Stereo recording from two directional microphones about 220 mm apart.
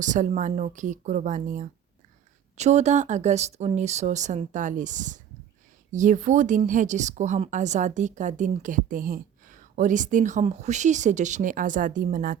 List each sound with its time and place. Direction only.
0.0 s speech: 35° right (ahead or behind)